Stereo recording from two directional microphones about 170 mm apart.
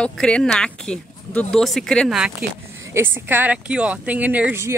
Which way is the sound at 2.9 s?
10° right (ahead or behind).